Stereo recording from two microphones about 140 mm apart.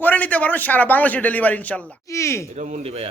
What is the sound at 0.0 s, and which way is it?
A man's voice, 10° left (ahead or behind).